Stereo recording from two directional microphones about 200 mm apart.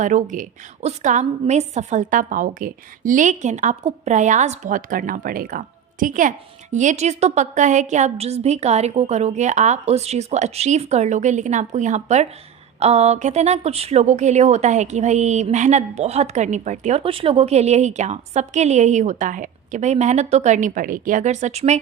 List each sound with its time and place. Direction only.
0.0 s a woman's voice: 40° right (ahead or behind)